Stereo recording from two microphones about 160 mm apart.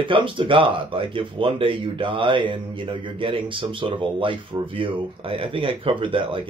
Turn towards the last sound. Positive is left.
turn(degrees=-30)  # may be behind; listen again after turning